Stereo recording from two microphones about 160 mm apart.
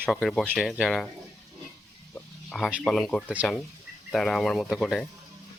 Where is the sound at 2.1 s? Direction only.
5° left (ahead or behind).